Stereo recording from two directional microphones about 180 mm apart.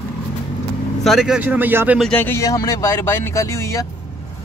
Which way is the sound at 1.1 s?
5° right (ahead or behind).